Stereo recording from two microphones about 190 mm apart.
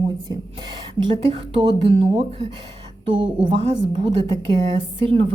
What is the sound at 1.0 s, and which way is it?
A woman's voice, 25° right (ahead or behind).